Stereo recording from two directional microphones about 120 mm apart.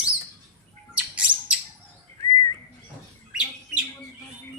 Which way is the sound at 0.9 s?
10° right (ahead or behind).